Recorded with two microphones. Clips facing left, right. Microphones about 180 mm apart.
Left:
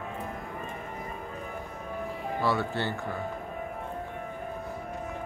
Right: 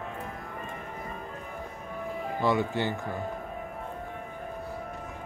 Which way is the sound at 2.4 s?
15° right (ahead or behind).